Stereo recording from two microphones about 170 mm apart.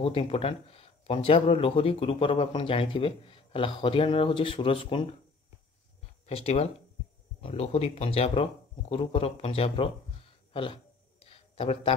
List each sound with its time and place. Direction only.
0.0 s speech: 35° left (ahead or behind)
6.2 s speech: 40° left (ahead or behind)
11.2 s a sound: 35° left (ahead or behind)